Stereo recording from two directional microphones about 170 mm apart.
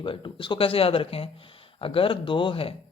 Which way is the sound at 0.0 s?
30° left (ahead or behind).